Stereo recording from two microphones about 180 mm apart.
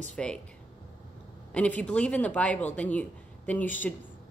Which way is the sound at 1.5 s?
5° left (ahead or behind).